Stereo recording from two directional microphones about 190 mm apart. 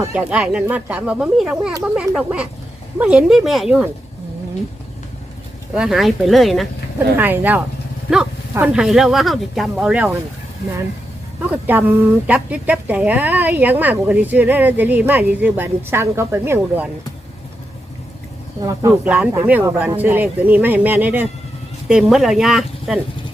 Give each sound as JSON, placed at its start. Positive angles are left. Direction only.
{"t": 0.0, "sound": "speech", "side_deg": -10}
{"t": 5.7, "sound": "speech", "side_deg": 0}
{"t": 11.5, "sound": "speech", "side_deg": -10}
{"t": 18.6, "sound": "speech", "side_deg": -15}